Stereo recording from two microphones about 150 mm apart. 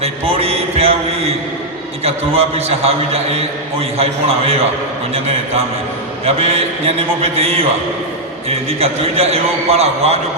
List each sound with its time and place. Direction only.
0.0 s a sound: 40° right (ahead or behind)
2.0 s a man's voice: 40° right (ahead or behind)
6.2 s a man's voice: 40° right (ahead or behind)
8.8 s a man's voice: 45° right (ahead or behind)